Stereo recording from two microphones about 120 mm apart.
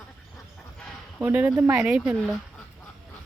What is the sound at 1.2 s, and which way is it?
Speech, 15° right (ahead or behind).